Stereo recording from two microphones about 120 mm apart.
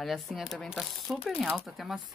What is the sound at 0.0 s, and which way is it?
Speech, centre (ahead or behind).